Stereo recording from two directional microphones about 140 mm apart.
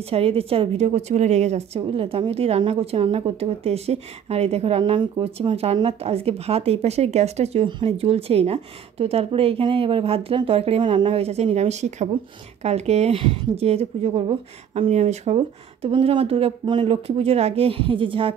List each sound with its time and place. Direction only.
0.1 s a woman's voice: 45° right (ahead or behind)